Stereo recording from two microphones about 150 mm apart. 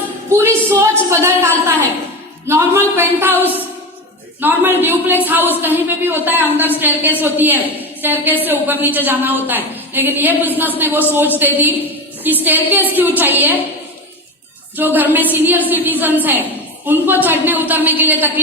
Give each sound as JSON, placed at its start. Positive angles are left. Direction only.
{"t": 0.3, "sound": "a sound", "side_deg": -15}
{"t": 2.5, "sound": "a woman's voice", "side_deg": -15}
{"t": 14.8, "sound": "a woman's voice", "side_deg": -10}